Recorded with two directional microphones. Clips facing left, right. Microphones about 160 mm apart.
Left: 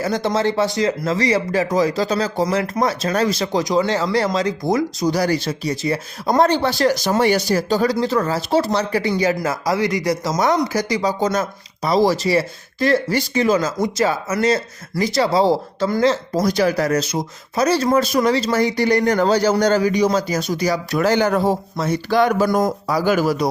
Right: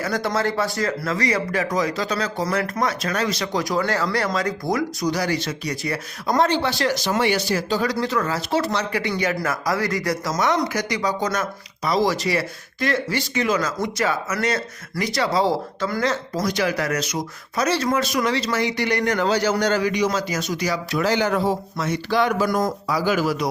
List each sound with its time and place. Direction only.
0.0 s speech: 25° left (ahead or behind)
5.1 s speech: 40° left (ahead or behind)
6.2 s speech: 40° left (ahead or behind); by 10.3 s 20° left (ahead or behind)
10.3 s speech: 35° left (ahead or behind)